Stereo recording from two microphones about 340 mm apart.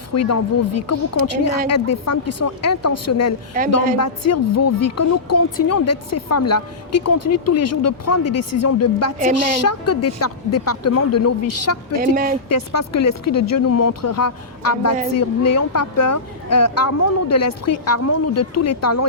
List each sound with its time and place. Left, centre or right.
0.1 s speech: left
11.9 s speech: right
12.5 s speech: left